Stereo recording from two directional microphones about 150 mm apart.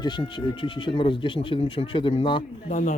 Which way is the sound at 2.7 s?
55° left (ahead or behind).